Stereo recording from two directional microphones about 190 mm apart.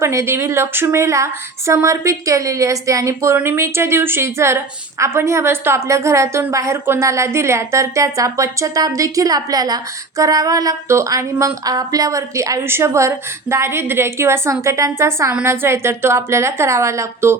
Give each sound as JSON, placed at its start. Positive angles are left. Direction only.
{"t": 0.0, "sound": "speech", "side_deg": -15}